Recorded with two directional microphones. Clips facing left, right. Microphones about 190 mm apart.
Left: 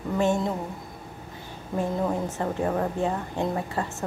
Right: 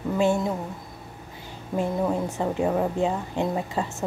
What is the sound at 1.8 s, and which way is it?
A woman's voice, 15° right (ahead or behind).